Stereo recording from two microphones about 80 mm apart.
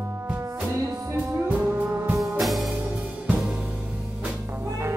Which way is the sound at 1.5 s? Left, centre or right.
Right.